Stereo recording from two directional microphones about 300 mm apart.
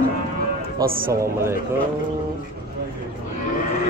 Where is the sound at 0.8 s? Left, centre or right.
Right.